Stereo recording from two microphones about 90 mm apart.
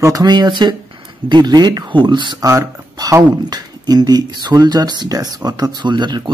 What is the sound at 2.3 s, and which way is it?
Speech, 40° right (ahead or behind).